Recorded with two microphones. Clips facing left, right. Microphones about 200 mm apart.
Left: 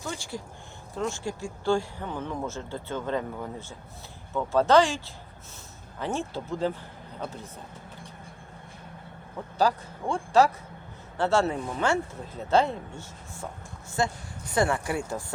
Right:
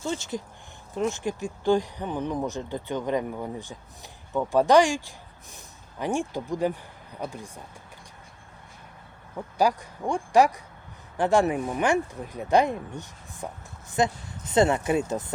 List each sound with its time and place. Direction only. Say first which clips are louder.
0.0 s speech: right 5 dB; 20° right (ahead or behind)
9.6 s speech: right 1 dB; 15° right (ahead or behind)